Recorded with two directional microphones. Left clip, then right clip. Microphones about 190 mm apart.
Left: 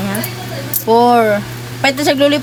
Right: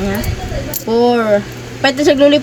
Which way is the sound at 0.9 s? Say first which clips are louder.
Left 2 dB; 30° left (ahead or behind).